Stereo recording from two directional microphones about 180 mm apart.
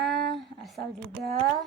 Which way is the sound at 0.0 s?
Centre (ahead or behind).